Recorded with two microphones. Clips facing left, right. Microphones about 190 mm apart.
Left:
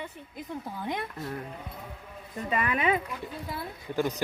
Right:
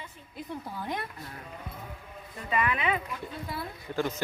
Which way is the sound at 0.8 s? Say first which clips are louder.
Left 3 dB; 20° left (ahead or behind).